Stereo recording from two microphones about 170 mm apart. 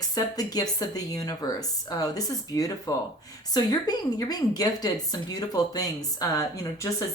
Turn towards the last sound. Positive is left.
turn(degrees=20)  # may be behind; listen again after turning